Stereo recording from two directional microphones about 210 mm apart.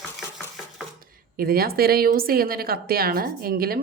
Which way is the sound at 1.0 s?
45° right (ahead or behind).